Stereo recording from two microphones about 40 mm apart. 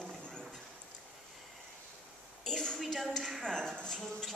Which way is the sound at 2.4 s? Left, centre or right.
Centre.